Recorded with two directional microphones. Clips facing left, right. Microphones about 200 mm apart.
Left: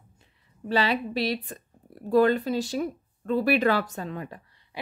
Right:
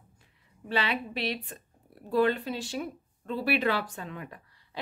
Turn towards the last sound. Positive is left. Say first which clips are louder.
# left 6 dB
turn(degrees=35)  # may be behind; listen again after turning